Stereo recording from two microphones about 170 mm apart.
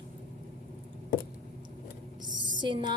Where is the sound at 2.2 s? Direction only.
25° right (ahead or behind).